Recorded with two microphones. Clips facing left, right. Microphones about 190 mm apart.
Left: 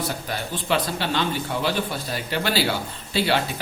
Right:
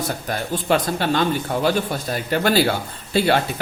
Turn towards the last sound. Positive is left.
turn(degrees=-50)  # may be behind; listen again after turning